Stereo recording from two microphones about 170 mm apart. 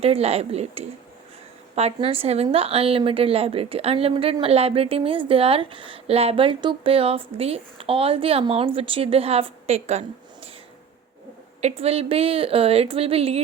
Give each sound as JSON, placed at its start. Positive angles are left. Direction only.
{"t": 0.0, "sound": "a woman's voice", "side_deg": -35}
{"t": 11.8, "sound": "a woman's voice", "side_deg": -35}